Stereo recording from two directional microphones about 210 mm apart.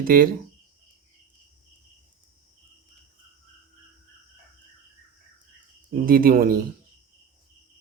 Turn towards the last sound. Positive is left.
turn(degrees=-45)  # may be behind; listen again after turning